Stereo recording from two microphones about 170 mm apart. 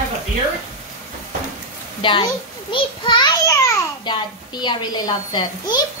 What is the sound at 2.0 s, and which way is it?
A child's voice, 25° left (ahead or behind).